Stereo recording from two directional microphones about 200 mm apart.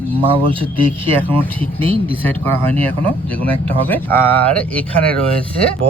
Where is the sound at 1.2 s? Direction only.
10° left (ahead or behind).